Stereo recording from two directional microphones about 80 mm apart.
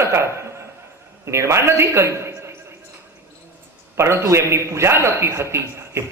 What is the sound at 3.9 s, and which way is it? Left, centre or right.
A man's voice, right.